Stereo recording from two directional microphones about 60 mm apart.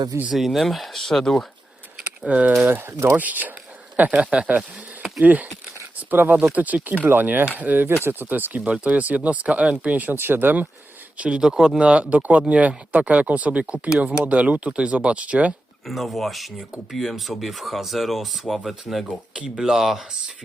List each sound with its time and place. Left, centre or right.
0.3 s speech: centre
2.2 s speech: right
6.0 s a sound: right
6.5 s speech: right
11.2 s speech: centre
11.8 s speech: centre
15.9 s speech: centre
19.0 s speech: centre